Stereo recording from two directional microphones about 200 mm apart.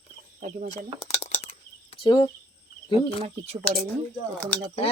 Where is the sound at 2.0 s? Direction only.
20° left (ahead or behind).